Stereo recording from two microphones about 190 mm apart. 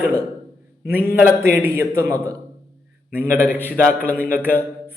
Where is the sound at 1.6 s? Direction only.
15° right (ahead or behind).